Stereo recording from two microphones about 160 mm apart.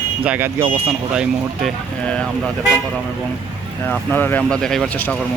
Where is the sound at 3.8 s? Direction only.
10° left (ahead or behind).